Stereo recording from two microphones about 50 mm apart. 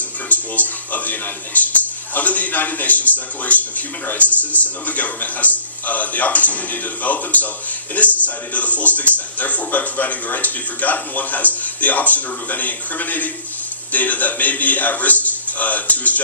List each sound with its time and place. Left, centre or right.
0.3 s speech: left